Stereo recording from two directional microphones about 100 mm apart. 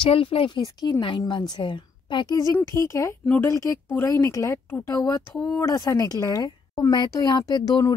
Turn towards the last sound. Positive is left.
turn(degrees=40)  # may be behind; listen again after turning